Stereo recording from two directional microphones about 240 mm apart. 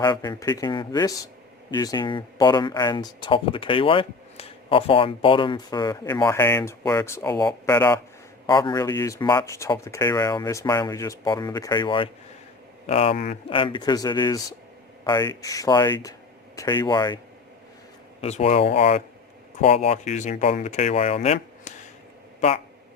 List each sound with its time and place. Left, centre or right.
0.0 s speech: centre
18.2 s speech: left